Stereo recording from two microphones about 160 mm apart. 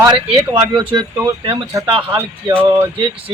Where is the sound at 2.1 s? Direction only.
10° right (ahead or behind).